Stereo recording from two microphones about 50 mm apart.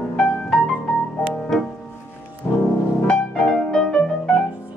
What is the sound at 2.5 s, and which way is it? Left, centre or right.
Music, left.